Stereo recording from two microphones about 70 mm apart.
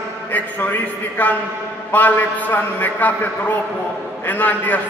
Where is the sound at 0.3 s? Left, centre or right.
Left.